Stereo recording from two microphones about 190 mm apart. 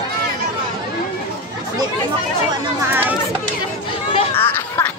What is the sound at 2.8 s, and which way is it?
Speech, 10° right (ahead or behind).